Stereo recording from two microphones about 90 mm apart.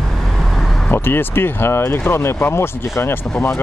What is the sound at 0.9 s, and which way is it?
Speech, 25° left (ahead or behind).